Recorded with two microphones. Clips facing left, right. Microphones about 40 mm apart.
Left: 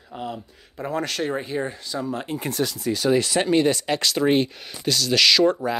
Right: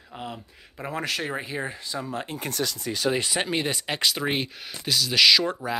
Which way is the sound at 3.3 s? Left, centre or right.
Centre.